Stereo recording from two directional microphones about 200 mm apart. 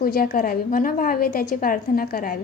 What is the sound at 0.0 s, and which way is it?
A woman's voice, 45° left (ahead or behind).